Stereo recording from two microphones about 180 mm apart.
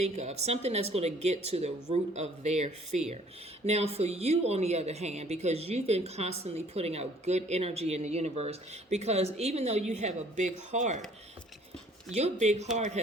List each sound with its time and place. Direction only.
0.0 s a woman's voice: 40° right (ahead or behind)
12.1 s a woman's voice: 35° right (ahead or behind)